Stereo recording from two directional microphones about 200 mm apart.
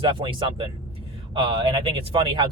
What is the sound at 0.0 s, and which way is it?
Speech, 25° right (ahead or behind).